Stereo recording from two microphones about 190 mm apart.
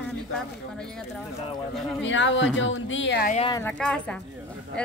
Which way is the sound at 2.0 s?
75° left (ahead or behind).